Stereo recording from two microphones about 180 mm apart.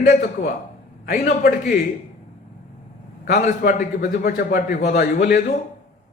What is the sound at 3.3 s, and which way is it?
A man's voice, 50° left (ahead or behind).